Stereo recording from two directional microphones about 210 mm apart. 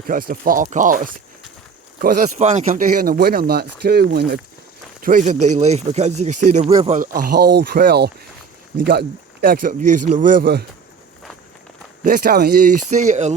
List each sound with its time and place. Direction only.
0.1 s speech: 45° right (ahead or behind)
2.2 s speech: 35° right (ahead or behind); by 4.4 s 50° right (ahead or behind)
4.9 s speech: 40° right (ahead or behind)
12.0 s speech: 50° right (ahead or behind)
12.9 s speech: 35° right (ahead or behind)